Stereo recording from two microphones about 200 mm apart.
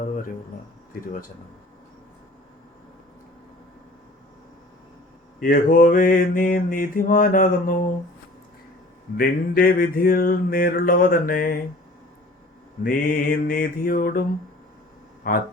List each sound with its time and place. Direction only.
5.4 s mantra: 45° left (ahead or behind)
9.1 s mantra: 45° left (ahead or behind)
12.8 s mantra: 45° left (ahead or behind)
15.3 s mantra: 50° left (ahead or behind)